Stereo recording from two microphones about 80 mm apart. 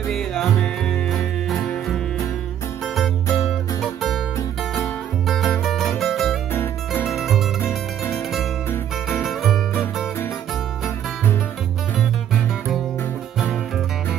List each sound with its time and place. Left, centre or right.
0.1 s music: centre
2.8 s music: centre
5.2 s music: centre
6.5 s music: left
7.1 s music: centre
7.6 s music: left
9.2 s music: centre